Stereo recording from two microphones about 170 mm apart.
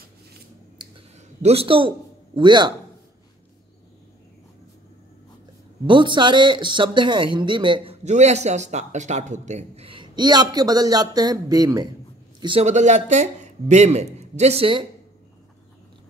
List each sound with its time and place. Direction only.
1.4 s a man's voice: 35° right (ahead or behind)
5.9 s a man's voice: 30° right (ahead or behind)
12.6 s a man's voice: 45° right (ahead or behind)